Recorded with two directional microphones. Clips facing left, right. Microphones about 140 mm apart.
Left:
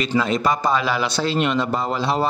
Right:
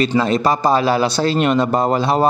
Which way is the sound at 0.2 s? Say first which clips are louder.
Right 4 dB; 35° right (ahead or behind).